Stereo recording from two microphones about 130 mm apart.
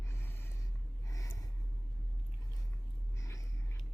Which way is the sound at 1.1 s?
25° left (ahead or behind).